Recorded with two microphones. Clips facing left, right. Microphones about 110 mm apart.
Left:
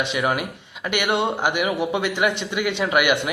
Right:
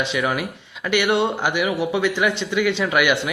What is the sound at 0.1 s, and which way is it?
Speech, 20° left (ahead or behind).